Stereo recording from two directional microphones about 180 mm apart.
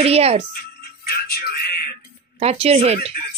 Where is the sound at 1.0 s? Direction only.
60° left (ahead or behind).